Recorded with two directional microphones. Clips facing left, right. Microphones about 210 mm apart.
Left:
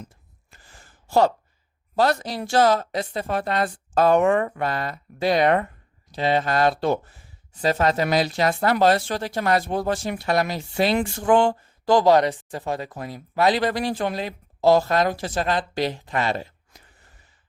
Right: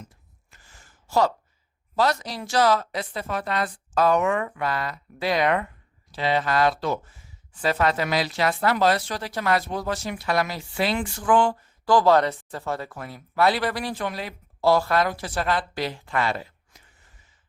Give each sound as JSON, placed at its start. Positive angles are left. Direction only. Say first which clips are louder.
{"t": 0.5, "sound": "a sound", "louder": "left 4 dB", "side_deg": 35}
{"t": 2.0, "sound": "speech", "louder": "left 3 dB", "side_deg": 50}
{"t": 3.2, "sound": "a woman's voice", "louder": "left 3 dB", "side_deg": 30}
{"t": 7.0, "sound": "a woman's voice", "louder": "left 1 dB", "side_deg": 40}
{"t": 8.8, "sound": "speech", "louder": "left 5 dB", "side_deg": 25}
{"t": 9.4, "sound": "speech", "louder": "left 2 dB", "side_deg": 45}
{"t": 10.2, "sound": "speech", "louder": "left 3 dB", "side_deg": 25}